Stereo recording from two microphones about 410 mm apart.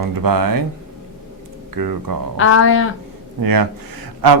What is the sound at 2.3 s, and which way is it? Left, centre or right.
Speech, left.